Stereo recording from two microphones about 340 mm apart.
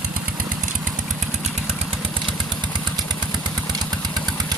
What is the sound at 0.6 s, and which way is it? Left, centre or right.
Motorcycle, right.